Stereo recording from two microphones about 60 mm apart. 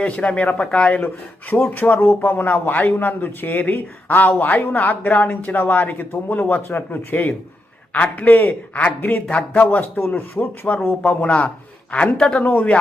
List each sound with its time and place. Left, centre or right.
0.0 s speech: left
9.2 s speech: centre
10.0 s speech: left
10.6 s speech: left
12.4 s speech: left